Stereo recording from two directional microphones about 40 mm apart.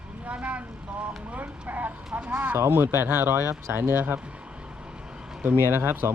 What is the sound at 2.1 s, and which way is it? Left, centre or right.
Speech, right.